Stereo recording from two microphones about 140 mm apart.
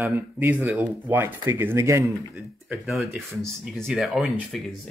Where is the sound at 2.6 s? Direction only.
5° right (ahead or behind).